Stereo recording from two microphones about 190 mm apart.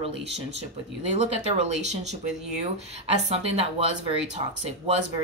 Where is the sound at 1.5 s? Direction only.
35° right (ahead or behind).